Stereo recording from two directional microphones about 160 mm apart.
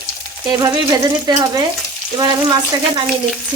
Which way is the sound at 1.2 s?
25° right (ahead or behind).